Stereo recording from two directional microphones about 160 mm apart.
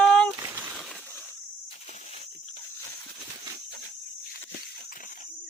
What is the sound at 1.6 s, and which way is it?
Insect, 45° left (ahead or behind).